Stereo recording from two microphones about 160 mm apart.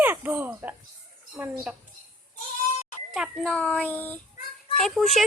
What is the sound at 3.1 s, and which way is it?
A child's voice, centre (ahead or behind).